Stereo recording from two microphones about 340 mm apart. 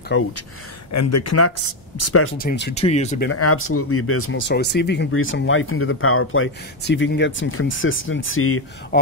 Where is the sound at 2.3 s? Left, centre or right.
Left.